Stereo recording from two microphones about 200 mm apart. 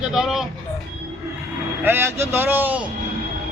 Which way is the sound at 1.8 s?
10° right (ahead or behind).